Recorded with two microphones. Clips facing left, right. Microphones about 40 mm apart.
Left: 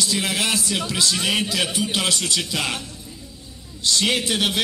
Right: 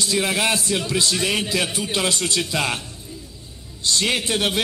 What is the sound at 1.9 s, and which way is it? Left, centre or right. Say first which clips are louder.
Speech: right 4 dB; right.